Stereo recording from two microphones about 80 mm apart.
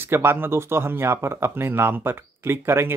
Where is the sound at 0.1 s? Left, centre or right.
Right.